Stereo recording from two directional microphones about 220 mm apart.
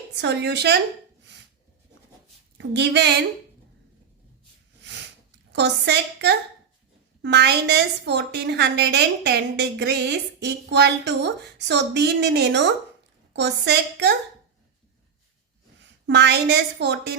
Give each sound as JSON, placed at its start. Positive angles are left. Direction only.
{"t": 0.2, "sound": "a woman's voice", "side_deg": -50}
{"t": 2.6, "sound": "a woman's voice", "side_deg": -50}
{"t": 5.5, "sound": "a woman's voice", "side_deg": -50}
{"t": 16.0, "sound": "a woman's voice", "side_deg": -50}